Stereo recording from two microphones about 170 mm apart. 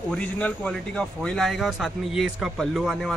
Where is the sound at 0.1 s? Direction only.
5° left (ahead or behind).